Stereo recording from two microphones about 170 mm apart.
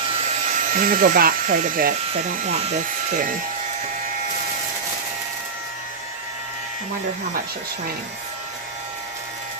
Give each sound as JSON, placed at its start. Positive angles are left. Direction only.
{"t": 0.5, "sound": "speech", "side_deg": -55}